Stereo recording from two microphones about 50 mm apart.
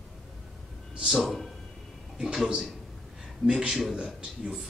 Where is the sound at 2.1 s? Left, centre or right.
Centre.